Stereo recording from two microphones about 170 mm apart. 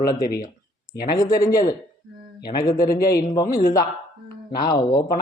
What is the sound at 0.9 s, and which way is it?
Speech, 65° left (ahead or behind).